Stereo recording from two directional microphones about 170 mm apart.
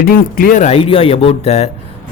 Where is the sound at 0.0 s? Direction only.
60° left (ahead or behind).